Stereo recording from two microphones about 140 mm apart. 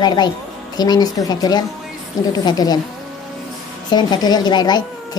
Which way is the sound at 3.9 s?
30° left (ahead or behind).